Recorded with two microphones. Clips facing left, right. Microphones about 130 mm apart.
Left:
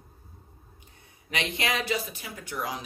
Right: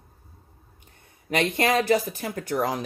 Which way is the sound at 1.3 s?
50° right (ahead or behind).